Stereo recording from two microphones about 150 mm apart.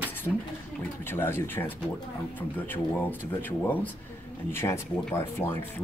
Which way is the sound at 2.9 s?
10° left (ahead or behind).